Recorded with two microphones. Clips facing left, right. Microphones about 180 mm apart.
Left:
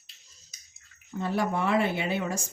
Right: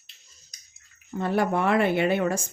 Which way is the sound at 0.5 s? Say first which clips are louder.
Even; 5° left (ahead or behind).